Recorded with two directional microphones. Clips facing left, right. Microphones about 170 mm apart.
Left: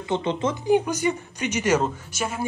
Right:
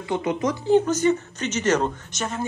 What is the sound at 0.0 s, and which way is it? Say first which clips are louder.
Speech: even; 25° left (ahead or behind).